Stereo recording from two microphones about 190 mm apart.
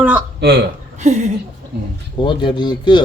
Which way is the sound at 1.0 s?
35° right (ahead or behind).